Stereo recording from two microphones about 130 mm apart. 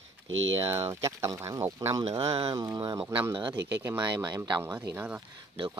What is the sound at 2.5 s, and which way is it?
Speech, 35° right (ahead or behind).